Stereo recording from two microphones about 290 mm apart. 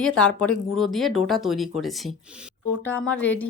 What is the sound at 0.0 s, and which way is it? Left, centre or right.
Speech, centre.